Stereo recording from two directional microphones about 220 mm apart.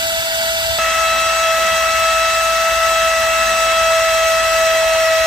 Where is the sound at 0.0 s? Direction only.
20° right (ahead or behind).